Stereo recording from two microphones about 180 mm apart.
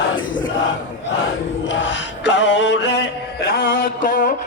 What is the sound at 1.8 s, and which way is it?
Music, 90° left.